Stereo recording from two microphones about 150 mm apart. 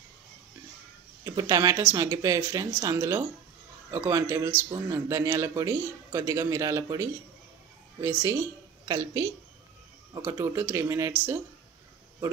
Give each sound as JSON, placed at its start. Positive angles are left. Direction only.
{"t": 1.2, "sound": "a woman's voice", "side_deg": -25}